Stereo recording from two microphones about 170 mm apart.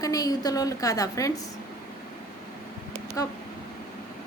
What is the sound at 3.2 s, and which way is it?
Speech, 20° left (ahead or behind).